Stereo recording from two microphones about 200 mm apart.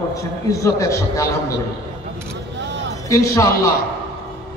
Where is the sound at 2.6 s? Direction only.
60° right (ahead or behind).